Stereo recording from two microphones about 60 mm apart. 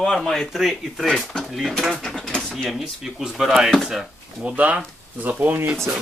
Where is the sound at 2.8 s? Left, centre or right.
Centre.